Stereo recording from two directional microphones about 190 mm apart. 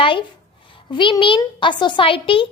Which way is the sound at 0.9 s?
25° left (ahead or behind).